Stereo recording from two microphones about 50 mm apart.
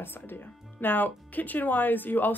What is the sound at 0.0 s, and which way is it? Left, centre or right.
Speech, left.